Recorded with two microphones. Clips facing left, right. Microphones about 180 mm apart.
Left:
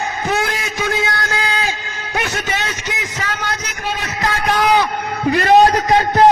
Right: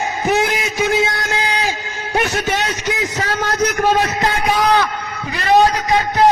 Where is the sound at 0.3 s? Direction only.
20° right (ahead or behind).